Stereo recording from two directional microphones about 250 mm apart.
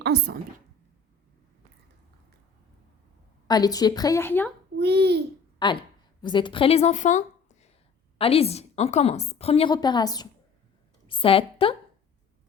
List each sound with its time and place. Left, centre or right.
0.0 s speech: right
3.4 s a woman's voice: centre
4.8 s a child's voice: right
5.6 s a woman's voice: centre